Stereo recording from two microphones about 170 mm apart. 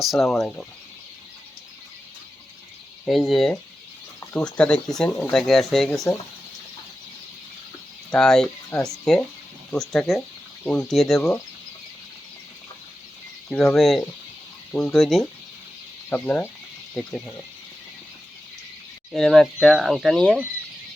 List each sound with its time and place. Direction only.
0.0 s speech: centre (ahead or behind)
3.1 s speech: centre (ahead or behind)
8.1 s speech: 5° left (ahead or behind)
13.5 s speech: centre (ahead or behind)
14.7 s speech: 15° left (ahead or behind)
14.9 s speech: centre (ahead or behind)
19.1 s speech: centre (ahead or behind)